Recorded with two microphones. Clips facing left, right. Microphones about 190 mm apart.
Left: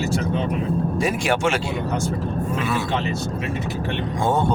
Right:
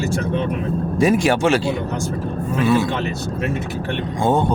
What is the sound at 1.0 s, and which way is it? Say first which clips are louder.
Speech: right 8 dB; 40° right (ahead or behind).